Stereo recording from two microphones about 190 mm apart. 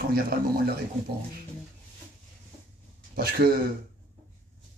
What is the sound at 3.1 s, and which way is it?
Speech, 50° right (ahead or behind).